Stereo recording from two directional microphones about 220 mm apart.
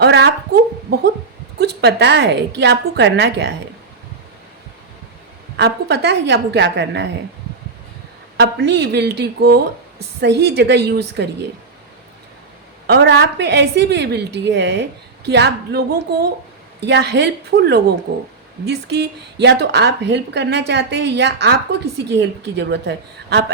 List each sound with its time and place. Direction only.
0.0 s a woman's voice: 50° right (ahead or behind)
5.5 s a woman's voice: 50° right (ahead or behind)
8.4 s a woman's voice: 50° right (ahead or behind)
12.9 s a woman's voice: 50° right (ahead or behind)